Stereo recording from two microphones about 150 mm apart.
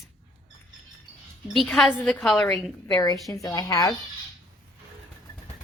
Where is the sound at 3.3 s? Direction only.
25° left (ahead or behind).